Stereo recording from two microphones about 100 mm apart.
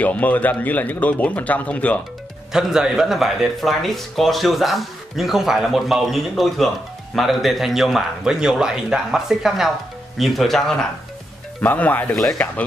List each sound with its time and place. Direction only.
0.0 s speech: 15° left (ahead or behind)
2.5 s speech: 5° right (ahead or behind)
11.6 s speech: 15° left (ahead or behind)